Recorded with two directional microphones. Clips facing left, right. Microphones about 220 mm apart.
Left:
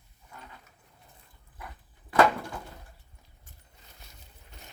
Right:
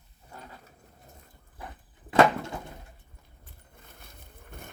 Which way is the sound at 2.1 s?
25° right (ahead or behind).